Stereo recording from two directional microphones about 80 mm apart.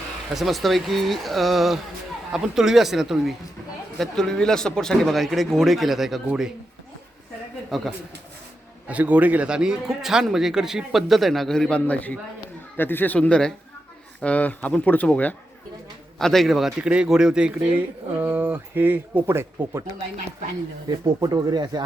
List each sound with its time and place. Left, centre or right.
0.3 s a man's voice: centre
3.9 s a man's voice: centre
7.7 s a man's voice: centre
8.9 s a man's voice: centre
11.9 s speech: centre
13.1 s speech: centre
16.1 s a man's voice: centre
18.2 s speech: right
21.2 s speech: right